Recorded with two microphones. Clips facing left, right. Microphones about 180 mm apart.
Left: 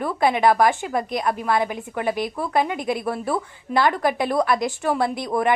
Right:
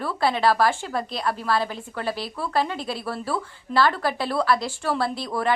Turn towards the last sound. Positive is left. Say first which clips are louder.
# left 3 dB
turn(degrees=20)  # may be behind; listen again after turning